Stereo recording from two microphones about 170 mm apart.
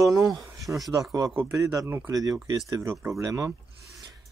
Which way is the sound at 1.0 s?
20° right (ahead or behind).